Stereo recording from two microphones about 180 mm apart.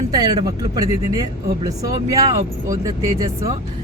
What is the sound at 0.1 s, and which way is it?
Speech, 20° right (ahead or behind).